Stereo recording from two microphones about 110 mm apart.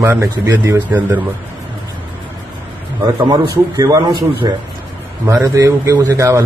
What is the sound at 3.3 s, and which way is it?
Speech, 35° right (ahead or behind).